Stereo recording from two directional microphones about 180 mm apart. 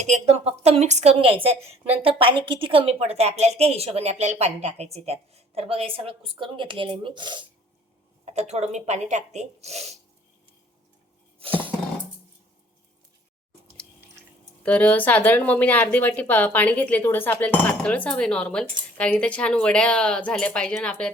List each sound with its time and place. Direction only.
0.0 s a woman's voice: 40° right (ahead or behind)
8.2 s a woman's voice: 35° right (ahead or behind)
11.3 s music: 30° right (ahead or behind)
14.6 s a woman's voice: 5° left (ahead or behind)